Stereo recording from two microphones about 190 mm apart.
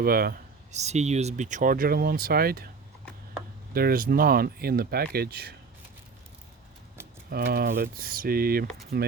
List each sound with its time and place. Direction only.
0.0 s speech: 50° right (ahead or behind)
0.7 s speech: 35° right (ahead or behind); by 2.6 s 50° right (ahead or behind)
3.8 s speech: 50° right (ahead or behind)
7.3 s speech: 55° right (ahead or behind)